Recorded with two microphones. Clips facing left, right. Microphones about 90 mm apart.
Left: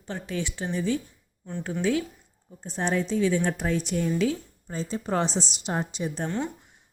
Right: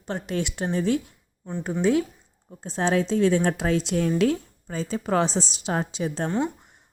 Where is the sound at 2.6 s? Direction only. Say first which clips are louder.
Right 4 dB; 90° right.